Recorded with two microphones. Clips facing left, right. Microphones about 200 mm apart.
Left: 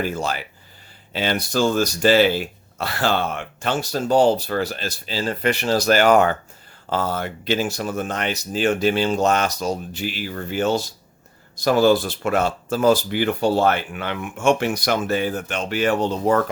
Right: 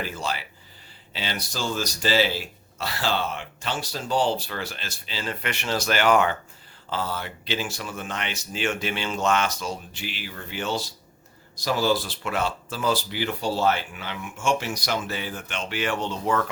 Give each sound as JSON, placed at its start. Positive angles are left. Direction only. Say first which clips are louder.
{"t": 0.0, "sound": "speech", "louder": "left 6 dB", "side_deg": 45}